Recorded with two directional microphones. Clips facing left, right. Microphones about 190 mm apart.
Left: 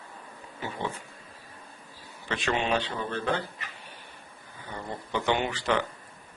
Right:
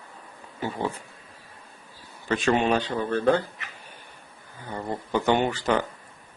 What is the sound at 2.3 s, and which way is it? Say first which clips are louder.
Speech: right 6 dB; 45° right (ahead or behind).